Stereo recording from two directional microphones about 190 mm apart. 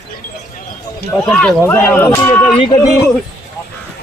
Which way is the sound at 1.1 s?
5° left (ahead or behind).